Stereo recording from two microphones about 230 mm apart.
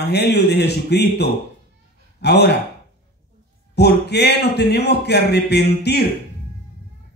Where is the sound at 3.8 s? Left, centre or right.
Left.